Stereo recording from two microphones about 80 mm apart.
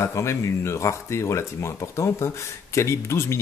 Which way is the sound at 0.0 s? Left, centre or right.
Left.